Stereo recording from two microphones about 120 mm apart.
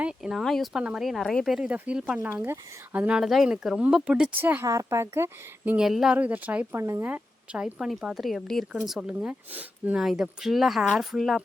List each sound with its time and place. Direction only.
0.0 s speech: 5° right (ahead or behind)
4.6 s speech: 25° right (ahead or behind)
5.7 s speech: 5° right (ahead or behind)
6.7 s speech: 25° right (ahead or behind)
7.1 s speech: 10° right (ahead or behind)